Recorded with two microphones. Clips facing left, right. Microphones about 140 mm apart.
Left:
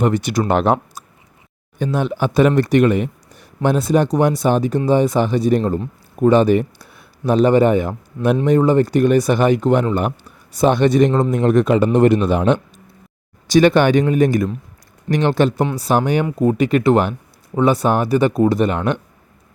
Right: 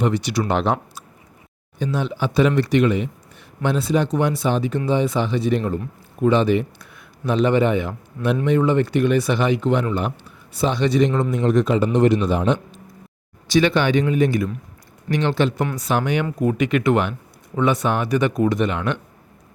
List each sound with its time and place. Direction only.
0.0 s a man's voice: 50° left (ahead or behind)
13.5 s speech: 45° left (ahead or behind)